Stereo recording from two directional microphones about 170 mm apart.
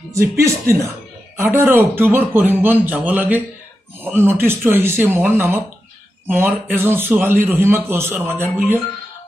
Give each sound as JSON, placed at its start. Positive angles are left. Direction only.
{"t": 0.1, "sound": "speech", "side_deg": -15}